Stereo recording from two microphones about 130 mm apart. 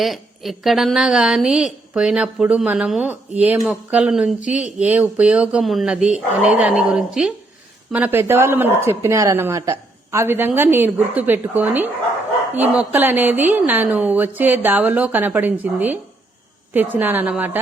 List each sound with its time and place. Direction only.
0.0 s a woman's voice: centre (ahead or behind)